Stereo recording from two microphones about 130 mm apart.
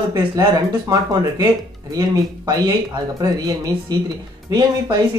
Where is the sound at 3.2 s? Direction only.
30° right (ahead or behind).